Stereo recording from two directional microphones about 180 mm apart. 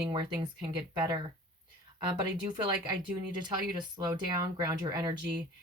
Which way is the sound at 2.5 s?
25° right (ahead or behind).